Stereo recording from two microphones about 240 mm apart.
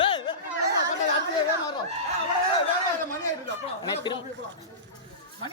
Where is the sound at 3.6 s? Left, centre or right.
Centre.